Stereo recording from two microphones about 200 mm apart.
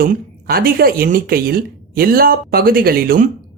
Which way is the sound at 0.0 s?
50° right (ahead or behind).